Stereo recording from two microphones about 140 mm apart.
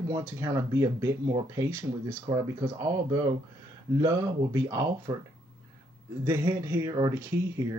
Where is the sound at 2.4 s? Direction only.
30° right (ahead or behind).